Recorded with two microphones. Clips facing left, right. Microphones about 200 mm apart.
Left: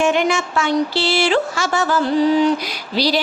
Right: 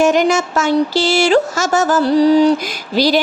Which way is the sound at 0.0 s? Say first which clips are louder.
Right 4 dB; 40° right (ahead or behind).